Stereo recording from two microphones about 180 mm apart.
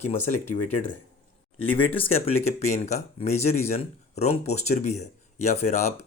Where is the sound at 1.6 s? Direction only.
30° left (ahead or behind).